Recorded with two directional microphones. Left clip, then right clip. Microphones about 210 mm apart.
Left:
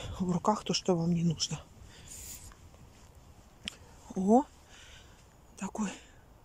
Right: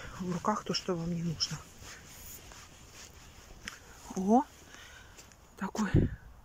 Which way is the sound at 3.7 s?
10° left (ahead or behind).